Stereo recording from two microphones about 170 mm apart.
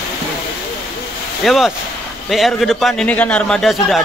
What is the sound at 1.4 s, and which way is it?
A man's voice, centre (ahead or behind).